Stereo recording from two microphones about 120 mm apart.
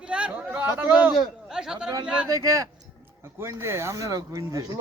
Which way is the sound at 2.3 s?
30° right (ahead or behind).